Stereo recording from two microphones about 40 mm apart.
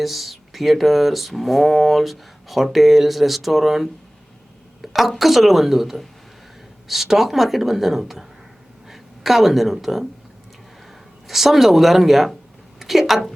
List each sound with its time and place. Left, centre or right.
0.0 s a woman's voice: centre
11.3 s speech: centre
12.8 s a sound: centre